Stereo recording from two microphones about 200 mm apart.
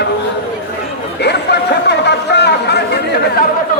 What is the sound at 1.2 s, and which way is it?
Speech, 55° left (ahead or behind).